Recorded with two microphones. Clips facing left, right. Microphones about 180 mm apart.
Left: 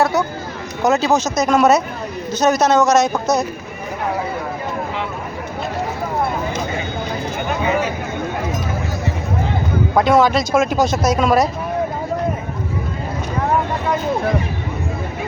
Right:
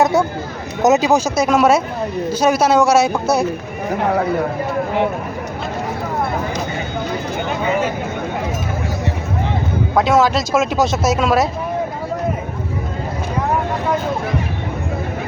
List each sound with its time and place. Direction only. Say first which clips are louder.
0.0 s a sound: right 2 dB; 25° right (ahead or behind)
0.8 s speech: right 2 dB; 20° right (ahead or behind)
9.9 s speech: left 1 dB; centre (ahead or behind)